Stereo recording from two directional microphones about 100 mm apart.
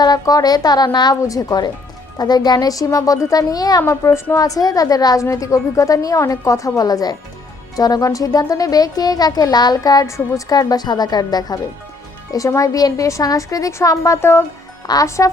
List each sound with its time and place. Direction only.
0.0 s speech: 40° left (ahead or behind)